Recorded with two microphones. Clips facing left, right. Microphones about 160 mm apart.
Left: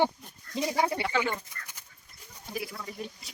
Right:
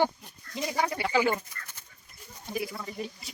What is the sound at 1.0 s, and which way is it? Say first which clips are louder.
Speech: right 3 dB; 5° right (ahead or behind).